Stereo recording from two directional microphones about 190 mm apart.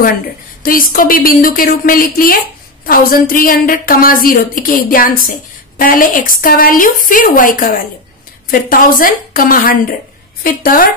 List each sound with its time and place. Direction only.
0.6 s a woman's voice: 50° left (ahead or behind)